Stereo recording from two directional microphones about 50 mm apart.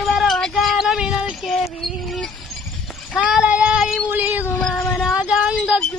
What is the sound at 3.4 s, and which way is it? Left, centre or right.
Female singing, right.